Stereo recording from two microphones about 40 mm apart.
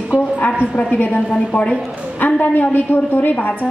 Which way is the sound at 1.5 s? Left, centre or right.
Left.